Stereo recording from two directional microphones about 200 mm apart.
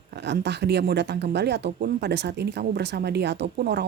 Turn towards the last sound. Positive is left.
turn(degrees=-55)  # may be behind; listen again after turning